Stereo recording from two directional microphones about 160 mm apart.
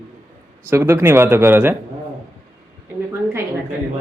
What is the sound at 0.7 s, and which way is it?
Speech, 15° right (ahead or behind).